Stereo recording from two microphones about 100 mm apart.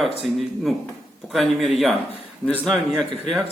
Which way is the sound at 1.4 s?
Centre (ahead or behind).